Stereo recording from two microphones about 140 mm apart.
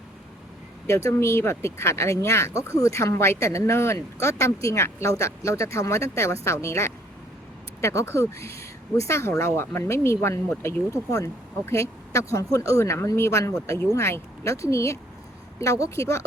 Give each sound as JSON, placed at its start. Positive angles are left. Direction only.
{"t": 0.9, "sound": "speech", "side_deg": 20}